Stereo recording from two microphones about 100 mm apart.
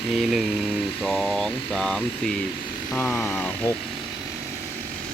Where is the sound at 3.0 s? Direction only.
20° left (ahead or behind).